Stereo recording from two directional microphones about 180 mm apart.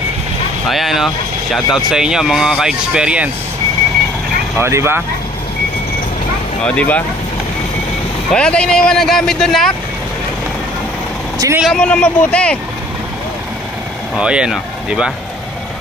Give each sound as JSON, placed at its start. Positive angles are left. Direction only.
{"t": 0.7, "sound": "speech", "side_deg": 0}
{"t": 4.6, "sound": "speech", "side_deg": -15}
{"t": 6.6, "sound": "speech", "side_deg": 5}
{"t": 8.3, "sound": "speech", "side_deg": 5}
{"t": 11.3, "sound": "speech", "side_deg": -15}
{"t": 11.6, "sound": "speech", "side_deg": 5}
{"t": 14.1, "sound": "speech", "side_deg": -5}